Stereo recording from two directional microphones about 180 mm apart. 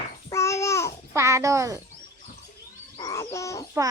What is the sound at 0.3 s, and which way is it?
Babbling, 15° left (ahead or behind).